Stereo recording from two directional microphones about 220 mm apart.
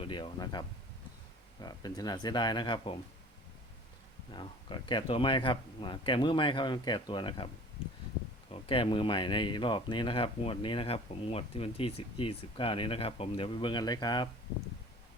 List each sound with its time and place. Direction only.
0.0 s speech: 20° left (ahead or behind)
1.6 s speech: 15° left (ahead or behind)
4.3 s speech: 20° left (ahead or behind)
8.5 s speech: 25° left (ahead or behind)